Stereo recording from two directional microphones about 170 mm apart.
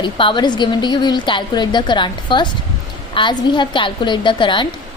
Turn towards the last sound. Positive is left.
turn(degrees=30)  # may be behind; listen again after turning